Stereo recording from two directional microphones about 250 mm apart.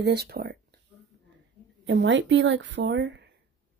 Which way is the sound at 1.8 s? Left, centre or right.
Right.